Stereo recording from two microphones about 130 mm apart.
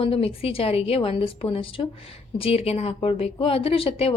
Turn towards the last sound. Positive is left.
turn(degrees=45)  # may be behind; listen again after turning